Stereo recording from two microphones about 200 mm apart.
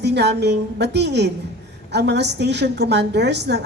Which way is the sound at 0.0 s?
55° right (ahead or behind).